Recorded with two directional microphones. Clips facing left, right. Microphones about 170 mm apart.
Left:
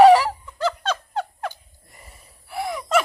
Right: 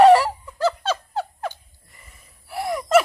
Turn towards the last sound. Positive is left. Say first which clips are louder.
# right 4 dB
turn(degrees=-5)  # may be behind; listen again after turning